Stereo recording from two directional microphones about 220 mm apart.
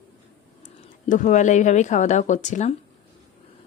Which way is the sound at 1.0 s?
35° left (ahead or behind).